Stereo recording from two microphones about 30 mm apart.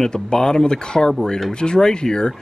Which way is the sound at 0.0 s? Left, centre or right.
Left.